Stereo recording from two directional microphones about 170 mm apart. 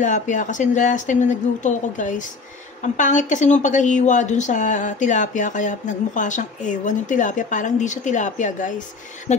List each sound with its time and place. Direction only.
0.0 s speech: 45° left (ahead or behind)